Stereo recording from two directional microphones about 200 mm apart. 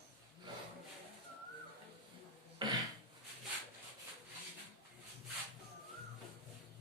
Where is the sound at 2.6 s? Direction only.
20° right (ahead or behind).